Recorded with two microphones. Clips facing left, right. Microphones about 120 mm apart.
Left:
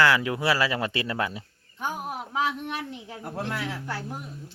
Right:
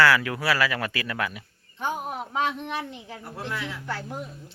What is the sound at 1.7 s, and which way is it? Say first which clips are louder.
Speech: right 2 dB; 5° left (ahead or behind).